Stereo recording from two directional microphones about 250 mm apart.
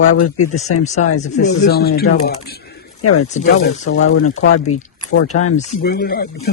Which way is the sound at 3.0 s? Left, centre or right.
Left.